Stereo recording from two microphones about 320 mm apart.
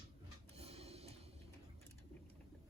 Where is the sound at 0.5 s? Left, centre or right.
Centre.